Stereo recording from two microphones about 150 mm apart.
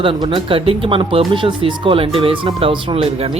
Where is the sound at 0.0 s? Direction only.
35° right (ahead or behind).